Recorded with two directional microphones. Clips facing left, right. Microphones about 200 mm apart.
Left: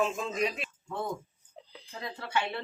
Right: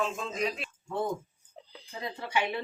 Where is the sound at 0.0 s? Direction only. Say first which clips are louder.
Left 2 dB; 5° left (ahead or behind).